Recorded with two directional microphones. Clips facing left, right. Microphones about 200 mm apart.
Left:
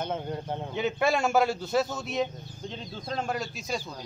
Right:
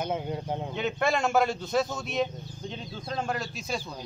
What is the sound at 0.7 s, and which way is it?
A man's voice, 5° left (ahead or behind).